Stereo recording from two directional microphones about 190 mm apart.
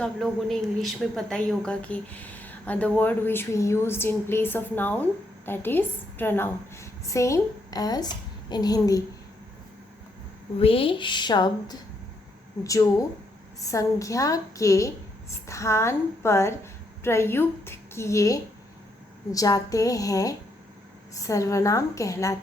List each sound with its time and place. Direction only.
0.0 s a woman's voice: centre (ahead or behind); by 9.0 s 20° left (ahead or behind)
10.6 s a woman's voice: 30° left (ahead or behind)